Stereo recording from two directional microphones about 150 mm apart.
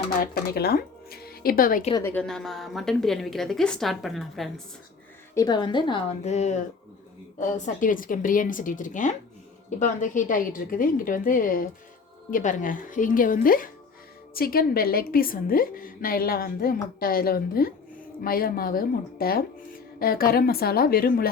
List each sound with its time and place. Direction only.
0.2 s speech: 90° left; by 1.8 s 70° left (ahead or behind)
2.0 s a woman's voice: 5° left (ahead or behind)
5.3 s a woman's voice: 25° left (ahead or behind)
6.2 s a woman's voice: 50° left (ahead or behind); by 21.2 s 85° left